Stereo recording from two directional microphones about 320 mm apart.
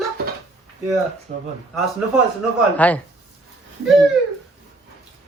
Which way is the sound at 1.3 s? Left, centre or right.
Right.